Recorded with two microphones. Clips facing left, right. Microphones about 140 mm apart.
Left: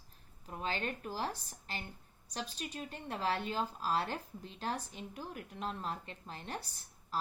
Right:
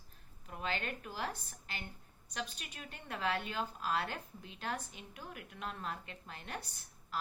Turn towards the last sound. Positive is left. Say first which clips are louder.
# left 3 dB
turn(degrees=35)  # may be behind; listen again after turning